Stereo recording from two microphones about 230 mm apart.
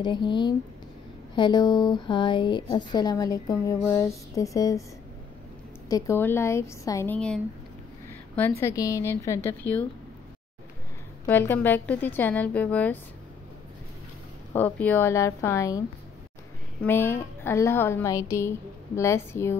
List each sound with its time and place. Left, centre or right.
0.0 s speech: centre
5.9 s a woman's voice: centre
11.2 s a woman's voice: centre
14.5 s a woman's voice: centre
16.8 s a woman's voice: centre